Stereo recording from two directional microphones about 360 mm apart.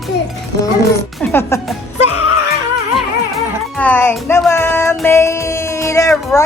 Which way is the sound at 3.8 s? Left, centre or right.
Centre.